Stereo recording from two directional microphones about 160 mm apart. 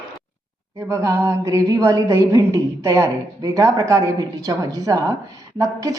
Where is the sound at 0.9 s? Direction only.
15° right (ahead or behind).